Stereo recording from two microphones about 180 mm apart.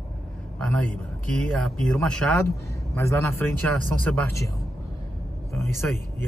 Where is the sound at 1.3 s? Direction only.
5° left (ahead or behind).